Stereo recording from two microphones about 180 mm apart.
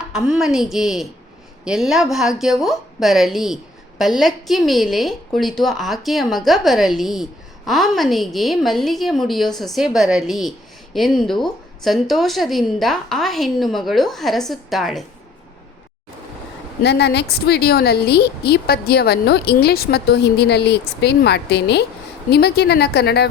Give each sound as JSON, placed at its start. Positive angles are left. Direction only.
{"t": 0.1, "sound": "a woman's voice", "side_deg": -5}
{"t": 16.8, "sound": "a woman's voice", "side_deg": 70}